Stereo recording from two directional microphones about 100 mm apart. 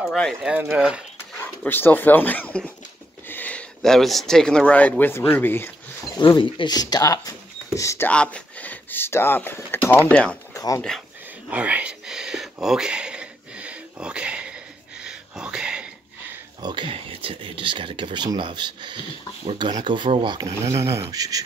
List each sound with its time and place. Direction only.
0.0 s speech: 5° left (ahead or behind)
0.5 s speech: 10° right (ahead or behind)
1.4 s speech: 20° left (ahead or behind)
3.3 s a sound: 15° left (ahead or behind)
3.8 s speech: 5° left (ahead or behind); by 5.7 s 20° left (ahead or behind)
6.1 s speech: 55° left (ahead or behind); by 8.1 s 30° left (ahead or behind)
8.1 s speech: 10° left (ahead or behind)
10.5 s a sound: 35° left (ahead or behind)
11.5 s a sound: 15° right (ahead or behind)
16.6 s speech: 50° right (ahead or behind)
16.9 s speech: 65° right (ahead or behind); by 20.4 s 50° right (ahead or behind)
20.4 s speech: 30° right (ahead or behind)